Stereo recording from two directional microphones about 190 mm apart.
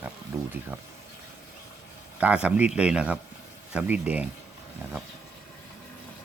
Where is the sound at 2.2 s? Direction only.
5° right (ahead or behind).